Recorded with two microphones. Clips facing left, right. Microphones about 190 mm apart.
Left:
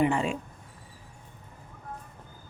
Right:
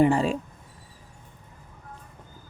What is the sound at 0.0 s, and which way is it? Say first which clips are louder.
Speech: right 5 dB; 35° right (ahead or behind).